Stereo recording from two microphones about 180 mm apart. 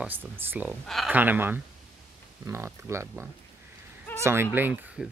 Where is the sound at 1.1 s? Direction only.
10° right (ahead or behind).